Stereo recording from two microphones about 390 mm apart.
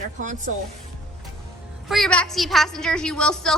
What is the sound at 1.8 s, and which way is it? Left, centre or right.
A woman's voice, centre.